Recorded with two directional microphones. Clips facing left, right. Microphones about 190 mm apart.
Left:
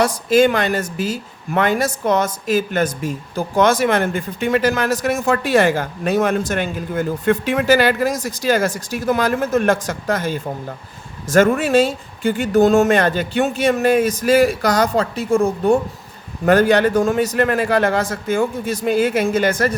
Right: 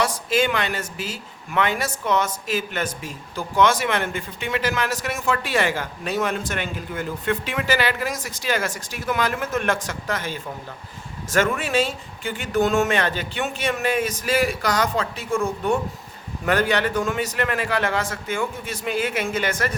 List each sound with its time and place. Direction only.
0.0 s speech: 40° left (ahead or behind)